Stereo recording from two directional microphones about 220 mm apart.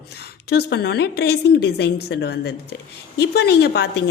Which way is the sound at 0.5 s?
50° left (ahead or behind).